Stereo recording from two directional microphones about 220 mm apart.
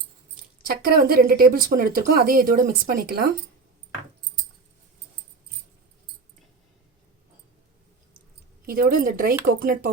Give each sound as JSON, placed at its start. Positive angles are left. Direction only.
{"t": 0.6, "sound": "speech", "side_deg": -45}
{"t": 8.6, "sound": "speech", "side_deg": -40}